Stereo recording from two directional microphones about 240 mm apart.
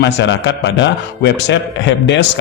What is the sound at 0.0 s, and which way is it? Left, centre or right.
A man's voice, left.